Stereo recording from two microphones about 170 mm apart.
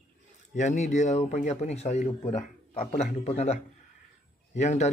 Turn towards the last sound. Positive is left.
turn(degrees=40)  # may be behind; listen again after turning